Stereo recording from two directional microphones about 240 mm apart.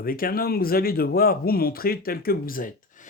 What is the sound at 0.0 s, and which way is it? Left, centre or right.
Speech, left.